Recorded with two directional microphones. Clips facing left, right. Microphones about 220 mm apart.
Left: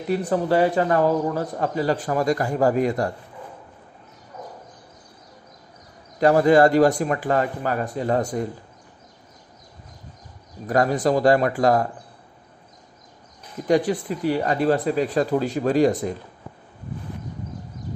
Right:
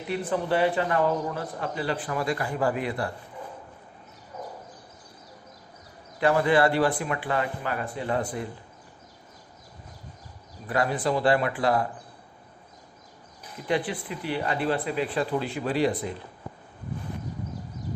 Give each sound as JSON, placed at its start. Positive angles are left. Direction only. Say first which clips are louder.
{"t": 0.1, "sound": "a man's voice", "louder": "left 6 dB", "side_deg": 40}
{"t": 6.1, "sound": "a man's voice", "louder": "left 6 dB", "side_deg": 40}
{"t": 10.7, "sound": "speech", "louder": "left 6 dB", "side_deg": 45}
{"t": 13.7, "sound": "speech", "louder": "left 8 dB", "side_deg": 45}